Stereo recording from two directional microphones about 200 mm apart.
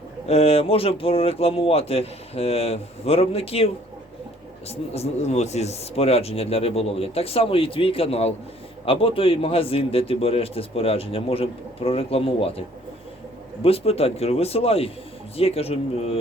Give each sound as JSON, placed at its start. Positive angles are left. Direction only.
{"t": 0.3, "sound": "a man's voice", "side_deg": 30}
{"t": 4.7, "sound": "a man's voice", "side_deg": 30}